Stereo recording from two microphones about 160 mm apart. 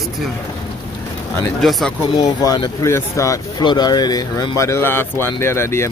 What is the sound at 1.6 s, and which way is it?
Speech, centre (ahead or behind).